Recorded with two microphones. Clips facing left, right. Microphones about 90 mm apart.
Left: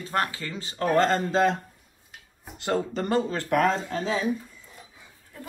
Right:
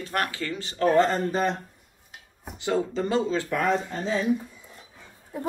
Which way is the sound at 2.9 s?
55° left (ahead or behind).